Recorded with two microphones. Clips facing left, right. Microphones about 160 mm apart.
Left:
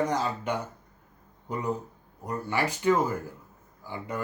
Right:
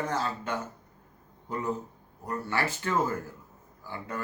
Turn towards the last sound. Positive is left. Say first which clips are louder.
# left 2 dB
turn(degrees=15)  # may be behind; listen again after turning